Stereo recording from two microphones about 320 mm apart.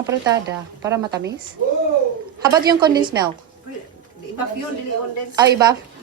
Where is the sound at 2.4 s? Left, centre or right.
Centre.